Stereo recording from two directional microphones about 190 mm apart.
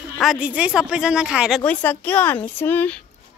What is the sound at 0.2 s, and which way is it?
Speech, 5° right (ahead or behind).